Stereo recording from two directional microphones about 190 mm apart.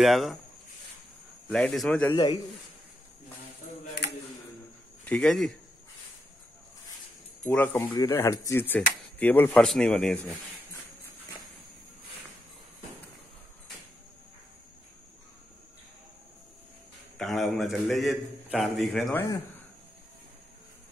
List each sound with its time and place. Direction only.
0.0 s a man's voice: centre (ahead or behind)
1.5 s a man's voice: 5° left (ahead or behind)
5.0 s a man's voice: 5° left (ahead or behind)
7.4 s a man's voice: 10° left (ahead or behind)
17.2 s a man's voice: centre (ahead or behind)